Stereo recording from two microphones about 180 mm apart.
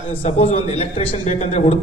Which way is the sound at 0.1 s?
35° left (ahead or behind).